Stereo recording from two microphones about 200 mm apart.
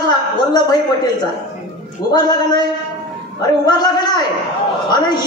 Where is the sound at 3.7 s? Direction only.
20° left (ahead or behind).